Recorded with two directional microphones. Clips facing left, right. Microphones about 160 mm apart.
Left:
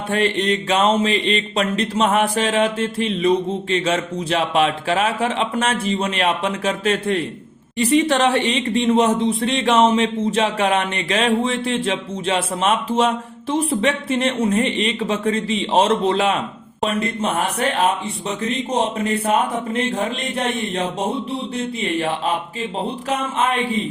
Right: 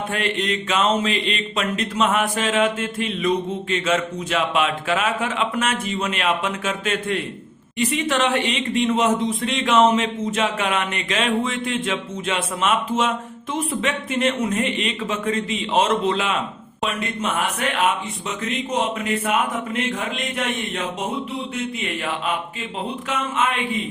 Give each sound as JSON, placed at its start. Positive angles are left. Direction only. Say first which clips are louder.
{"t": 0.1, "sound": "speech", "louder": "left 8 dB", "side_deg": 35}